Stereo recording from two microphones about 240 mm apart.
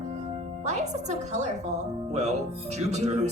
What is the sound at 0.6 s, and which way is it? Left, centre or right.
Speech, right.